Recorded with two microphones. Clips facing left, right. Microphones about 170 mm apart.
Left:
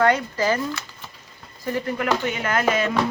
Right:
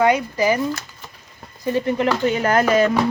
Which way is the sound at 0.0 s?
15° right (ahead or behind).